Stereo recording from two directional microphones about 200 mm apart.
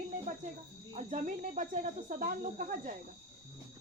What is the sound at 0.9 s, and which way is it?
Speech, 40° right (ahead or behind).